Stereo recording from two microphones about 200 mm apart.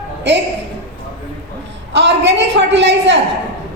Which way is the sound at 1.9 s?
60° right (ahead or behind).